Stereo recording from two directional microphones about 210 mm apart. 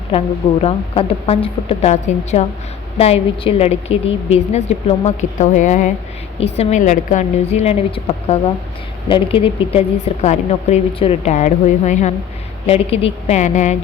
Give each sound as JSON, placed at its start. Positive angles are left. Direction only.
{"t": 0.6, "sound": "a woman's voice", "side_deg": 25}